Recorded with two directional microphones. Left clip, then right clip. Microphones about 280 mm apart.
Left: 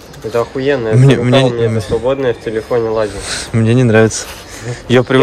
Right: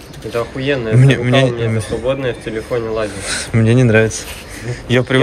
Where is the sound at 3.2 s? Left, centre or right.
Centre.